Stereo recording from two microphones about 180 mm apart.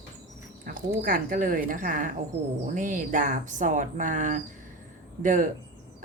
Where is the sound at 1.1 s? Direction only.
50° right (ahead or behind).